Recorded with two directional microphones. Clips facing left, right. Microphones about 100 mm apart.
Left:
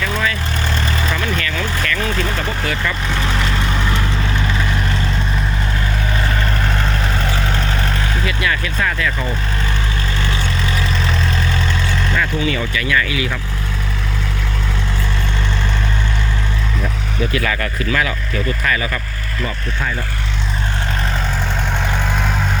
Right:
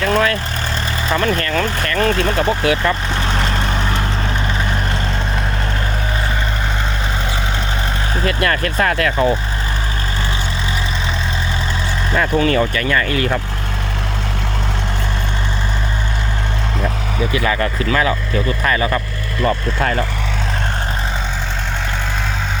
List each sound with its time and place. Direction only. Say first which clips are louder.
0.0 s vehicle: right 6 dB; 50° right (ahead or behind)
1.1 s speech: right 5 dB; 40° right (ahead or behind)
3.2 s speech: right 1 dB; 25° right (ahead or behind)
3.4 s vehicle: right 1 dB; 35° right (ahead or behind)
8.2 s speech: right 6 dB; 50° right (ahead or behind)
12.1 s speech: right 6 dB; 35° right (ahead or behind)
12.5 s speech: right 4 dB; 45° right (ahead or behind)
17.3 s speech: right 5 dB; 25° right (ahead or behind)
19.5 s speech: right 8 dB; 70° right (ahead or behind)